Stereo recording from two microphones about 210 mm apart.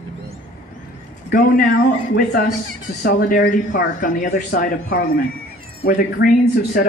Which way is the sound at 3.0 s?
40° left (ahead or behind).